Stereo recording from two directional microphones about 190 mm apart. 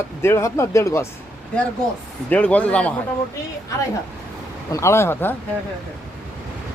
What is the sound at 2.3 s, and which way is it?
Speech, 5° left (ahead or behind).